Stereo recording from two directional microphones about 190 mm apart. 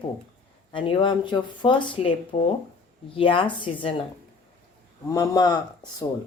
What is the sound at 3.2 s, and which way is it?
Speech, 25° left (ahead or behind).